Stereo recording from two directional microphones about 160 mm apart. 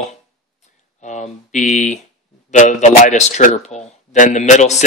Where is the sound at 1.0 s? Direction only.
50° left (ahead or behind).